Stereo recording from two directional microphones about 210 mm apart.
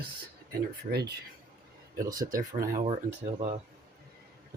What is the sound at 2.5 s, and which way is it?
Speech, 15° right (ahead or behind).